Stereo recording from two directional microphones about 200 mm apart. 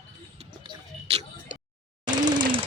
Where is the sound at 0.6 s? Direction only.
30° right (ahead or behind).